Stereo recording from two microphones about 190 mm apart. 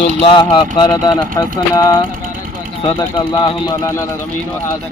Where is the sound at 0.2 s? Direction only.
25° left (ahead or behind).